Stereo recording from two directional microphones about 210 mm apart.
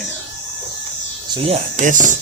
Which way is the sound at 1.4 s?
35° right (ahead or behind).